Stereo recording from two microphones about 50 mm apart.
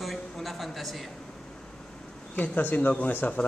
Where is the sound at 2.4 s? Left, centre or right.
Left.